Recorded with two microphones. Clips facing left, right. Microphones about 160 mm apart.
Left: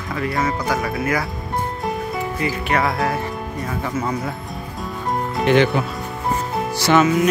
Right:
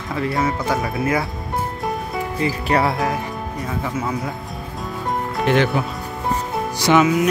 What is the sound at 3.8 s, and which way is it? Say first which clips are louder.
Speech: left 2 dB; centre (ahead or behind).